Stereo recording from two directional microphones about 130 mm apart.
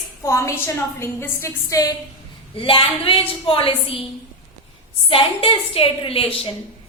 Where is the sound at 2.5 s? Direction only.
45° left (ahead or behind).